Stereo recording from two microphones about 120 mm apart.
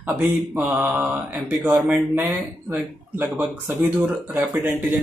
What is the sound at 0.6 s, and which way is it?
Speech, 10° right (ahead or behind).